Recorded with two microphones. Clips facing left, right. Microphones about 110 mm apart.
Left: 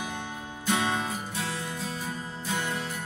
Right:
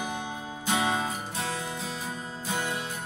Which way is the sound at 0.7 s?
15° right (ahead or behind).